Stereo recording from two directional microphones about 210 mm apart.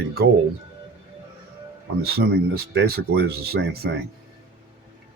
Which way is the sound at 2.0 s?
50° right (ahead or behind).